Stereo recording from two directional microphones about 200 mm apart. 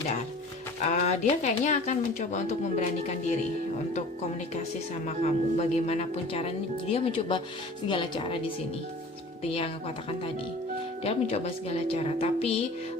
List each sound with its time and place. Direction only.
0.8 s speech: 35° left (ahead or behind)
5.0 s speech: 35° left (ahead or behind)
9.4 s speech: 30° left (ahead or behind)
11.0 s speech: 30° left (ahead or behind)